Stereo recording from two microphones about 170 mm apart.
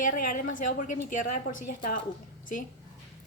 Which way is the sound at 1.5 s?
75° left (ahead or behind).